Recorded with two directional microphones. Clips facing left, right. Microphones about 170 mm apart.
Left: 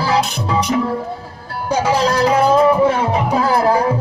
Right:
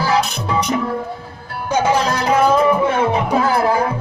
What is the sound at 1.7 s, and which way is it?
Music, 35° left (ahead or behind).